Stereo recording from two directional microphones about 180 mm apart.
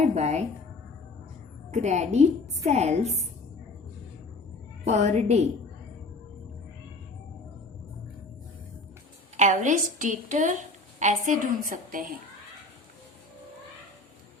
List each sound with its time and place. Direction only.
0.1 s a woman's voice: 35° right (ahead or behind)
1.7 s a woman's voice: 40° right (ahead or behind)
4.9 s a woman's voice: 40° right (ahead or behind)
9.4 s a woman's voice: 45° right (ahead or behind)